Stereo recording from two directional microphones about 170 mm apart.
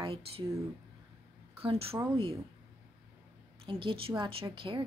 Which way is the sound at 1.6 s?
35° right (ahead or behind).